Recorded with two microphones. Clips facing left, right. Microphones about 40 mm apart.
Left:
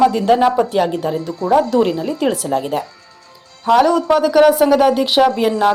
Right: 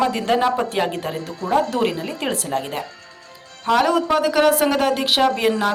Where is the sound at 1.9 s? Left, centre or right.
Right.